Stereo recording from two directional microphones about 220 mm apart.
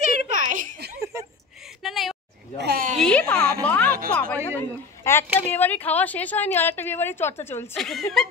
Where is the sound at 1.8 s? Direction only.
Centre (ahead or behind).